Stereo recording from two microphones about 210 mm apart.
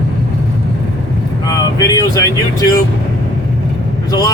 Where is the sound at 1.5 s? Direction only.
15° left (ahead or behind).